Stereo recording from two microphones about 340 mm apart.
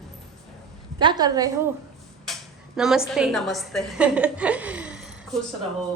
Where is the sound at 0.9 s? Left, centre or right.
Centre.